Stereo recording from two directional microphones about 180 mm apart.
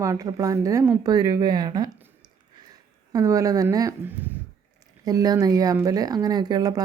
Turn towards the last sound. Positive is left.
turn(degrees=-20)  # may be behind; listen again after turning